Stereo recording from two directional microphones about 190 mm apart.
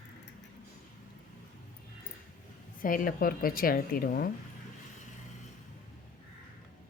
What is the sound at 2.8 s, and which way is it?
A woman's voice, 45° left (ahead or behind).